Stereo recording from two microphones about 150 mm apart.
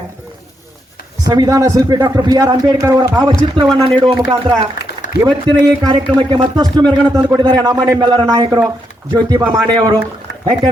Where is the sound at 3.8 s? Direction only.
35° right (ahead or behind).